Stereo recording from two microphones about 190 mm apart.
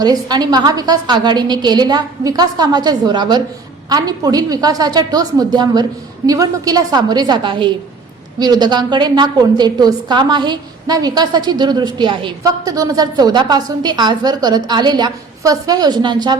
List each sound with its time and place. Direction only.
0.0 s a woman's voice: 20° right (ahead or behind)